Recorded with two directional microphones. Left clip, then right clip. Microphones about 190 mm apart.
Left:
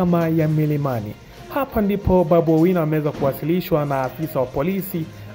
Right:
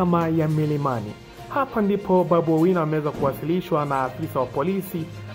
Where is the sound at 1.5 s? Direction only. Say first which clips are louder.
Left 1 dB; 35° left (ahead or behind).